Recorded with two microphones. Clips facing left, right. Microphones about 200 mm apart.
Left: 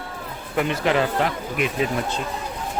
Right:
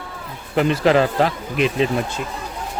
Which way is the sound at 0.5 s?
30° right (ahead or behind).